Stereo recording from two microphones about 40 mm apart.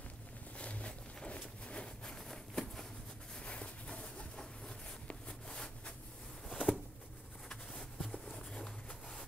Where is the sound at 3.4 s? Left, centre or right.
Left.